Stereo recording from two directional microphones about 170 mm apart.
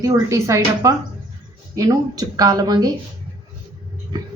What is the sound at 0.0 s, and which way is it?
A woman's voice, 15° right (ahead or behind).